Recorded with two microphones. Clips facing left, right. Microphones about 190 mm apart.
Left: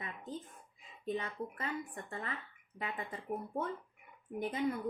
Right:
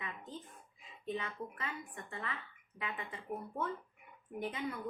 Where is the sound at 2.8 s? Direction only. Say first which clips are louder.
Left 2 dB; 40° left (ahead or behind).